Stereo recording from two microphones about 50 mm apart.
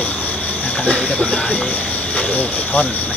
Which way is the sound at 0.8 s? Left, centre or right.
Centre.